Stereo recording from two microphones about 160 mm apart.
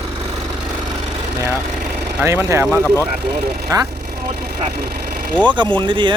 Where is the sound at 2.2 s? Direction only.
15° right (ahead or behind).